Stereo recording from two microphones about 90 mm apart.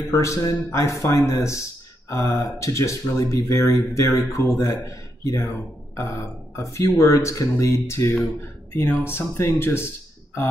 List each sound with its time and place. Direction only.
0.1 s speech: 35° left (ahead or behind)